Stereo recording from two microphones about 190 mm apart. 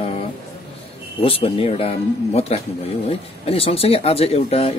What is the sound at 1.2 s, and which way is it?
Speech, 30° left (ahead or behind).